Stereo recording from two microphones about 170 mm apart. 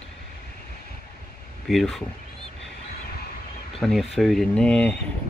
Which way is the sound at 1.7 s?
Centre (ahead or behind).